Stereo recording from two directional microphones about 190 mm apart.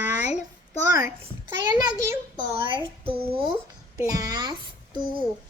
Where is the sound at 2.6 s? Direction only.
25° right (ahead or behind).